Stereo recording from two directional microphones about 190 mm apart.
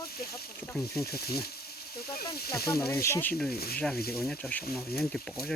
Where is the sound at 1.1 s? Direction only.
55° left (ahead or behind).